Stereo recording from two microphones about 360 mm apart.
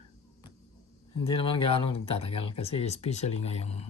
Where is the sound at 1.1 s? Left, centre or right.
Centre.